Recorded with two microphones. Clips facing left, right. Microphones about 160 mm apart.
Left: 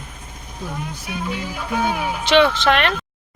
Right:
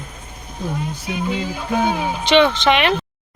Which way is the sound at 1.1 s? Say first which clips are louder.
Right 4 dB; 20° right (ahead or behind).